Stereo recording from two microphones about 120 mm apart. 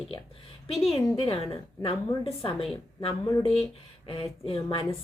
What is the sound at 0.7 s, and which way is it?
A woman's voice, 55° left (ahead or behind).